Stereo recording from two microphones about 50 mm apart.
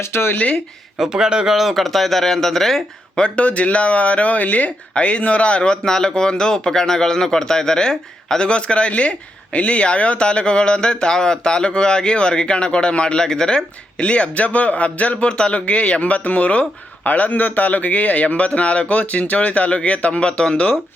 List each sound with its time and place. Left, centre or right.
0.0 s speech: left
0.9 s speech: centre
1.5 s speech: centre
3.2 s speech: left
14.0 s speech: left